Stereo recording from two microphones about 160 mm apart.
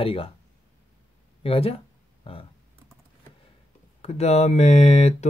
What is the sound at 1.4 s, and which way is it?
Speech, 35° left (ahead or behind).